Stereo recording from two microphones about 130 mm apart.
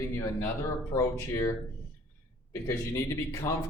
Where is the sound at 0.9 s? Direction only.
20° left (ahead or behind).